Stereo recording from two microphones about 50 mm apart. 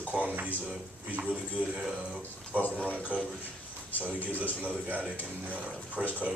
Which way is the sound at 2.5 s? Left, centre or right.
Right.